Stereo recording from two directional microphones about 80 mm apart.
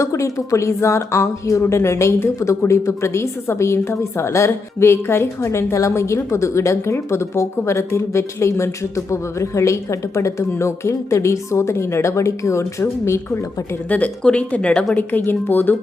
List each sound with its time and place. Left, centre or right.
0.0 s speech: left
13.9 s speech: centre
14.9 s speech: left